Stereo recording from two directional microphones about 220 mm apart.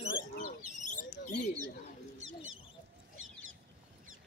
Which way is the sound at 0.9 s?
35° left (ahead or behind).